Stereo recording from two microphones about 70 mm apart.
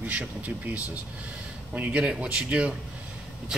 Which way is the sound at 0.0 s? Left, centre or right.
Right.